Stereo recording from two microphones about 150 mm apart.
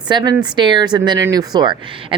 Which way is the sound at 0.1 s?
30° right (ahead or behind).